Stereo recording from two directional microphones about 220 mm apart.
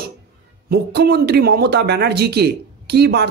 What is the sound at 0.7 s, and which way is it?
A man's voice, 45° right (ahead or behind).